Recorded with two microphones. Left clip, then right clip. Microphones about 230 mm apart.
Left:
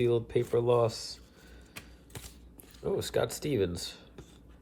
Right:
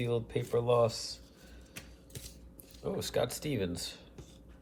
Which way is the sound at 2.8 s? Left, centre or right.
Left.